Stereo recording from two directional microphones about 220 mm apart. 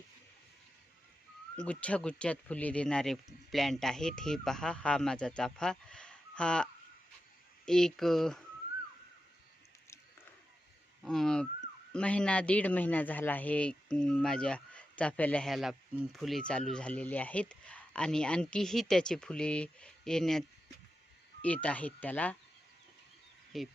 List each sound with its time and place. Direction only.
1.5 s a man's voice: 5° left (ahead or behind)
11.0 s a man's voice: centre (ahead or behind)
21.4 s speech: 5° left (ahead or behind)
23.5 s a man's voice: centre (ahead or behind)